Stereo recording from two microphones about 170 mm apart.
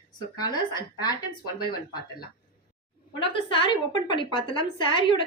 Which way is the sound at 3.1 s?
30° left (ahead or behind).